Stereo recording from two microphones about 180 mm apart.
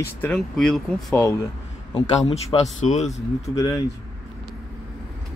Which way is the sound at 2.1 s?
35° left (ahead or behind).